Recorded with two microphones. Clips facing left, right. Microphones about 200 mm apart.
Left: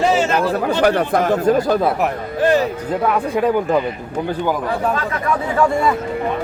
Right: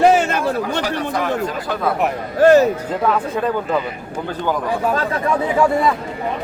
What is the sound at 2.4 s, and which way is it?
Speech, 45° right (ahead or behind).